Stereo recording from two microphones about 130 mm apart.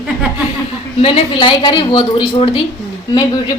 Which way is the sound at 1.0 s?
45° left (ahead or behind).